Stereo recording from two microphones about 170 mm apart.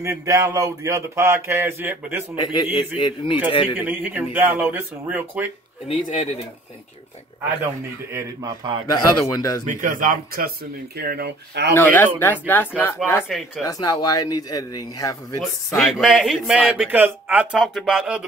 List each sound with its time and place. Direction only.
0.0 s speech: 20° right (ahead or behind)
2.4 s speech: 30° left (ahead or behind)
3.7 s speech: 10° right (ahead or behind)
5.9 s speech: 40° left (ahead or behind)
8.1 s speech: 25° right (ahead or behind)
8.9 s speech: 25° left (ahead or behind)
9.7 s speech: 50° right (ahead or behind); by 11.7 s 85° right
11.7 s speech: 10° left (ahead or behind)
15.9 s a man's voice: centre (ahead or behind)